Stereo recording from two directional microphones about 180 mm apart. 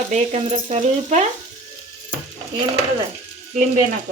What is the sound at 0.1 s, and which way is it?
Stir, 40° right (ahead or behind).